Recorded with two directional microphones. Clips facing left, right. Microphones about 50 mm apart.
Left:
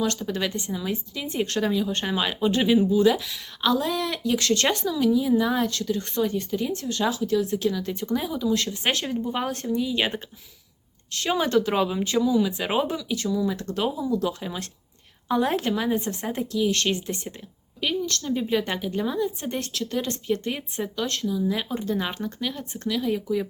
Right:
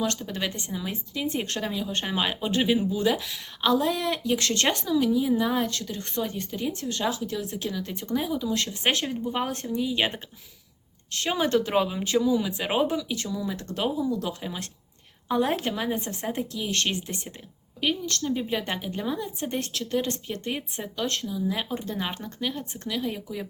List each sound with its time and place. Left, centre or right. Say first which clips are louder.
0.3 s speech: left 3 dB; centre
0.5 s speech: left 4 dB; right
8.4 s speech: left 3 dB; right
9.0 s speech: left 1 dB; centre
11.1 s speech: left 2 dB; right
13.0 s speech: left 5 dB; right
14.0 s speech: left 2 dB; centre
16.6 s a woman's voice: left 5 dB; right
18.2 s speech: left 3 dB; centre
20.3 s a woman's voice: left 5 dB; centre
20.9 s speech: left 1 dB; centre